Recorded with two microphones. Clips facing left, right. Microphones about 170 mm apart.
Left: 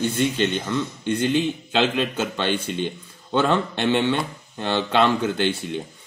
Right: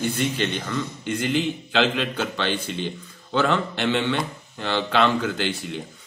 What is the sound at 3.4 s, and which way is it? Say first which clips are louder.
A man's voice: left 1 dB; 25° left (ahead or behind).